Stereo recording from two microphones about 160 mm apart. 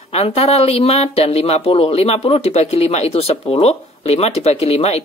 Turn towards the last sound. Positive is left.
turn(degrees=40)  # may be behind; listen again after turning